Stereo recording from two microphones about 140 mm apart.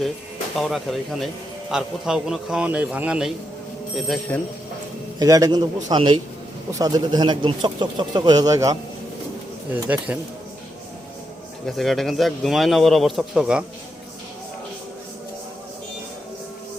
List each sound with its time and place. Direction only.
0.6 s a man's voice: centre (ahead or behind)
5.2 s a man's voice: 25° right (ahead or behind)
9.8 s speech: 10° right (ahead or behind)
11.6 s a man's voice: centre (ahead or behind)